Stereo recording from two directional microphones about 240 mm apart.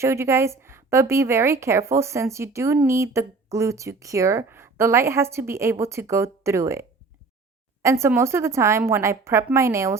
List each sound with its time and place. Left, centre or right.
0.0 s a woman's voice: centre